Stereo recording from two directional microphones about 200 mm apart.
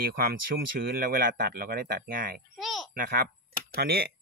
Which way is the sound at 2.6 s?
Centre (ahead or behind).